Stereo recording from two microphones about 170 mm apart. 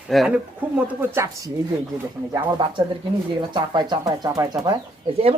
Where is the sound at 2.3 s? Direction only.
25° right (ahead or behind).